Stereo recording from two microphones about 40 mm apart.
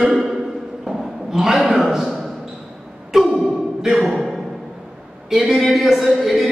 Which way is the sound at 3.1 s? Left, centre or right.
Centre.